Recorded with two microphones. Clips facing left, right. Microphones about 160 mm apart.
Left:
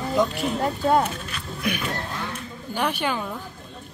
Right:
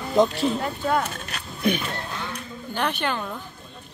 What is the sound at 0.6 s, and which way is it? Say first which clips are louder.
Speech: left 4 dB; 30° left (ahead or behind).